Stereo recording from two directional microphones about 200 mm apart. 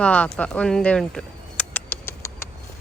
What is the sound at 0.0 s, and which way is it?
Speech, 5° left (ahead or behind).